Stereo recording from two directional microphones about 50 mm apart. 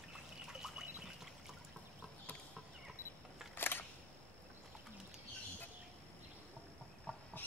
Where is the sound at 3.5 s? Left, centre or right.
Left.